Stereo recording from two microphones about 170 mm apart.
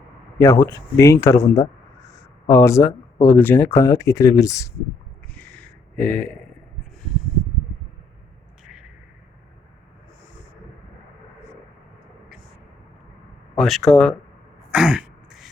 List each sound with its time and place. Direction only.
0.3 s speech: 15° left (ahead or behind)
5.3 s a sound: 10° left (ahead or behind)
13.6 s speech: centre (ahead or behind)
14.7 s throat clearing: 5° right (ahead or behind)